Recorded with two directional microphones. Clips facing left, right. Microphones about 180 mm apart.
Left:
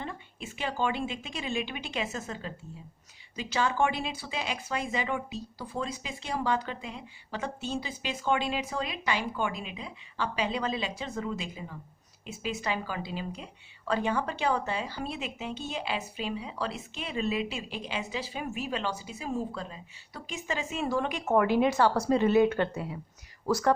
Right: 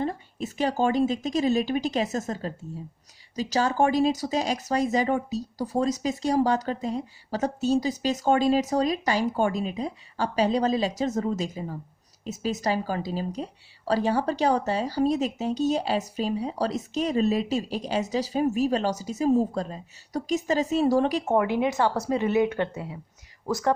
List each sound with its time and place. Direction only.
0.0 s speech: 40° right (ahead or behind)
21.3 s a woman's voice: 20° right (ahead or behind)